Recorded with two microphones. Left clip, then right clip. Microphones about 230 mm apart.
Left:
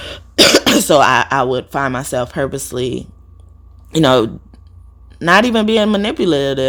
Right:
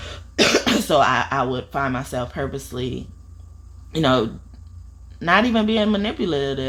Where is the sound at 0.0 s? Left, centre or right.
Left.